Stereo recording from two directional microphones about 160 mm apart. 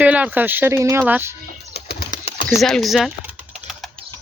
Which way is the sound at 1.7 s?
75° left (ahead or behind).